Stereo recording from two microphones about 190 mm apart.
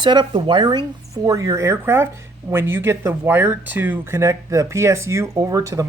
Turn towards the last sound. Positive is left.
turn(degrees=-15)  # may be behind; listen again after turning